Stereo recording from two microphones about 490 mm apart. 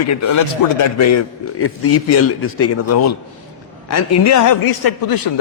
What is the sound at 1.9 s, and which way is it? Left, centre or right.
A man's voice, left.